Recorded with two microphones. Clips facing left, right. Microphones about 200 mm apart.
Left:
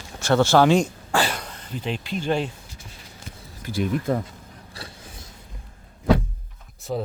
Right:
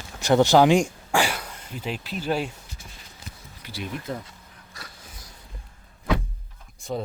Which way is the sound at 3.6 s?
50° left (ahead or behind).